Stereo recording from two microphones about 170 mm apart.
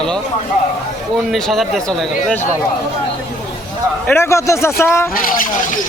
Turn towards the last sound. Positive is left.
turn(degrees=50)  # may be behind; listen again after turning